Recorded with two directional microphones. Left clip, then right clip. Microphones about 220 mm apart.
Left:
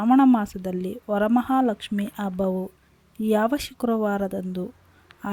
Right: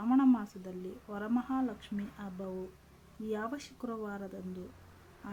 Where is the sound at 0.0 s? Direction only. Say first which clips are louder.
Left 11 dB; 35° left (ahead or behind).